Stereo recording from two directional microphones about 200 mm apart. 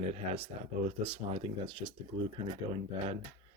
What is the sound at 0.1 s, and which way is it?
Speech, 30° right (ahead or behind).